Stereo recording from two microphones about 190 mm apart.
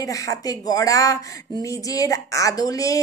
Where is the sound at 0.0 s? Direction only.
15° left (ahead or behind).